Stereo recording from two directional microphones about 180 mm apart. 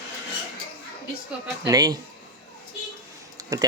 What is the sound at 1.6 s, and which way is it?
Speech, 20° right (ahead or behind).